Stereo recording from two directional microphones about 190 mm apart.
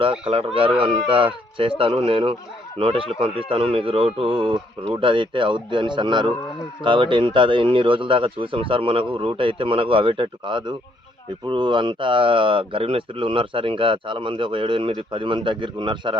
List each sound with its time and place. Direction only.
0.0 s speech: 30° right (ahead or behind)
4.4 s speech: 5° right (ahead or behind)
4.9 s speech: 25° right (ahead or behind)